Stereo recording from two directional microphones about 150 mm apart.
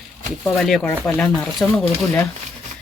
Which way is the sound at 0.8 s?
15° left (ahead or behind).